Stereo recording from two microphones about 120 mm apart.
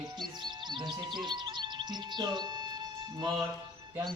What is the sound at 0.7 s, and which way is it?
Speech, 40° right (ahead or behind).